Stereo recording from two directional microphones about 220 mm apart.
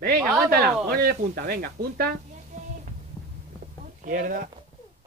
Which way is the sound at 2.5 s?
30° right (ahead or behind).